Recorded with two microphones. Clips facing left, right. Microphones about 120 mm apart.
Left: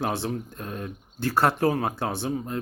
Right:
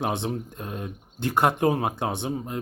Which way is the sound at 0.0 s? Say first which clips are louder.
Even; 20° right (ahead or behind).